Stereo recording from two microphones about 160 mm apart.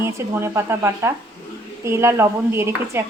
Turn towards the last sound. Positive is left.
turn(degrees=-15)  # may be behind; listen again after turning